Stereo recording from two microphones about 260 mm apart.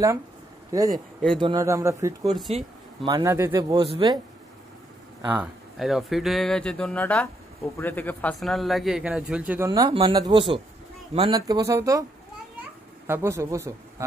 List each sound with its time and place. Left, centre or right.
0.7 s speech: centre
0.9 s speech: centre
1.4 s speech: centre
2.5 s speech: right
3.1 s speech: centre
5.2 s speech: centre
9.7 s a man's voice: centre